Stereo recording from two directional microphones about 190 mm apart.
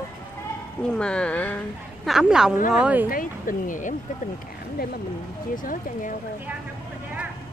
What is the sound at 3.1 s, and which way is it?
Speech, 45° left (ahead or behind).